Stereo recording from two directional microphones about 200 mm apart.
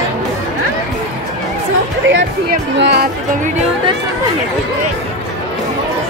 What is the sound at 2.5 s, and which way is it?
Music, 55° right (ahead or behind).